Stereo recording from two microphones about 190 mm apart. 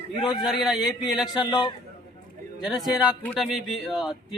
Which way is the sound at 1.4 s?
25° left (ahead or behind).